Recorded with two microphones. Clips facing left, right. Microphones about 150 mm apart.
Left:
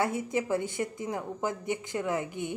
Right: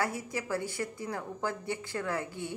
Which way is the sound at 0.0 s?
20° left (ahead or behind).